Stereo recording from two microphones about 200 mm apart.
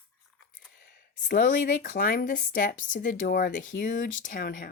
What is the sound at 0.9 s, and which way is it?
Speech, 45° left (ahead or behind).